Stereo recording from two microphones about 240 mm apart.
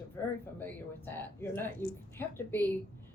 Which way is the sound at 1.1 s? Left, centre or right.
Centre.